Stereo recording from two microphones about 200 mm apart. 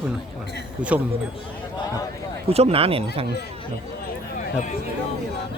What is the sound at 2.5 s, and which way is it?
Speech, 30° right (ahead or behind).